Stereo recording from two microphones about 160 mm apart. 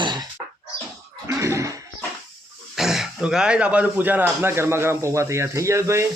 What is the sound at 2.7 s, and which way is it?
Speech, centre (ahead or behind).